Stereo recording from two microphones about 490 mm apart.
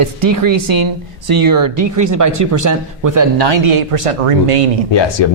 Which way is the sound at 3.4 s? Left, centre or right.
Right.